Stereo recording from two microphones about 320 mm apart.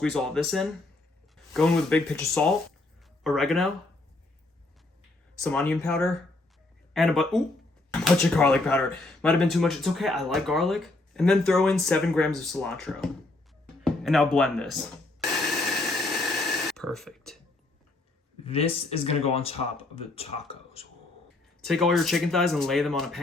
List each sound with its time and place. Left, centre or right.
0.0 s speech: centre
5.4 s speech: centre
16.0 s a sound: centre
18.4 s speech: centre
21.6 s speech: centre